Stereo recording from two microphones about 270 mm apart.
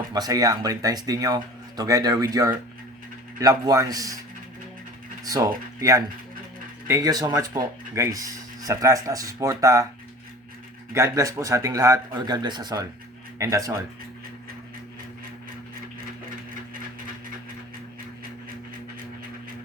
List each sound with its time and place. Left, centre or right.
0.1 s speech: centre
5.2 s speech: centre
10.9 s speech: centre